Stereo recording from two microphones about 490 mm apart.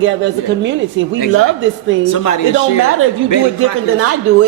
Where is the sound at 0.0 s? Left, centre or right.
Right.